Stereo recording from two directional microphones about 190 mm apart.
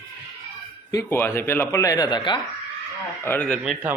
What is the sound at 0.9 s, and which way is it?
Speech, 15° left (ahead or behind).